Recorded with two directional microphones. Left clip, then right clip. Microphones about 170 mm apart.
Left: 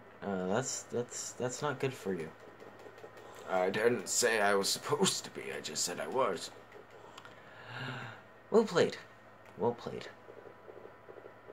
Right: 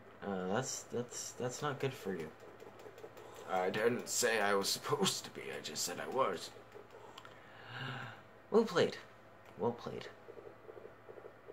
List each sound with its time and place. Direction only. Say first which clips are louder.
0.2 s speech: left 3 dB; 20° left (ahead or behind)
3.4 s speech: left 4 dB; 25° left (ahead or behind)
7.6 s gasp: left 2 dB; 20° left (ahead or behind)
9.6 s speech: left 4 dB; 20° left (ahead or behind)